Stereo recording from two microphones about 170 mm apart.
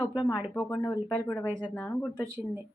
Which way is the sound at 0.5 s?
10° left (ahead or behind).